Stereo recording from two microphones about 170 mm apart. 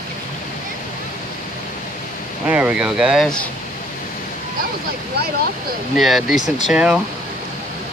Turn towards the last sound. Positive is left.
turn(degrees=-5)  # may be behind; listen again after turning